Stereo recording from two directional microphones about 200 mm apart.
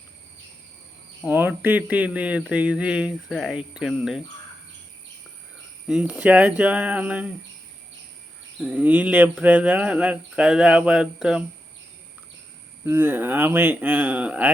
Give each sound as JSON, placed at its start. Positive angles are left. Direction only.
{"t": 1.3, "sound": "speech", "side_deg": -10}
{"t": 5.9, "sound": "speech", "side_deg": -5}
{"t": 8.5, "sound": "speech", "side_deg": -5}
{"t": 12.8, "sound": "speech", "side_deg": -10}